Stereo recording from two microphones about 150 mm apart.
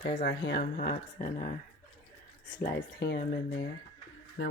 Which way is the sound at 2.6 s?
85° left.